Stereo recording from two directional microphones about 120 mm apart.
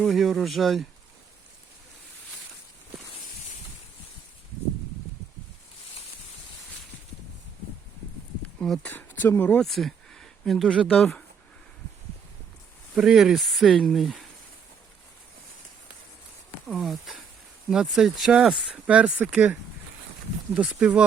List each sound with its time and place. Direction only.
0.0 s speech: centre (ahead or behind)
8.5 s speech: 5° left (ahead or behind)
8.9 s speech: 15° left (ahead or behind)
9.6 s a sound: centre (ahead or behind)
10.8 s speech: 5° left (ahead or behind)
12.9 s speech: 5° right (ahead or behind)
16.6 s speech: centre (ahead or behind)